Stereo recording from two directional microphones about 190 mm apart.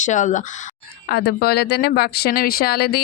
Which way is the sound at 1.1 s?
60° left (ahead or behind).